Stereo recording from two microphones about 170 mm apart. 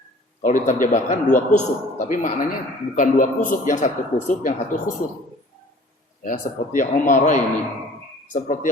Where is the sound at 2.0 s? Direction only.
50° left (ahead or behind).